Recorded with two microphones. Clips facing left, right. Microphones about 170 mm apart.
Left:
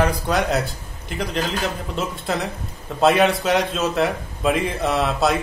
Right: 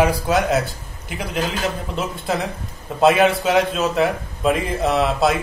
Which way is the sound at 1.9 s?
Centre (ahead or behind).